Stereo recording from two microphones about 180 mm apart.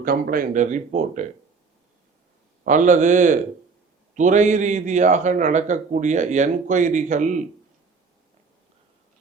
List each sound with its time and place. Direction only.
0.0 s a man's voice: 50° right (ahead or behind)
2.6 s a man's voice: 45° right (ahead or behind)